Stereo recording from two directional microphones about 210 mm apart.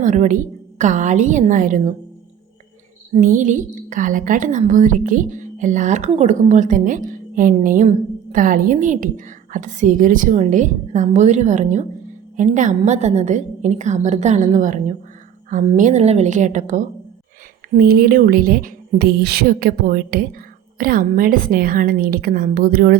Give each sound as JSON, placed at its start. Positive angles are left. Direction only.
{"t": 0.0, "sound": "a woman's voice", "side_deg": -35}
{"t": 3.2, "sound": "a woman's voice", "side_deg": -40}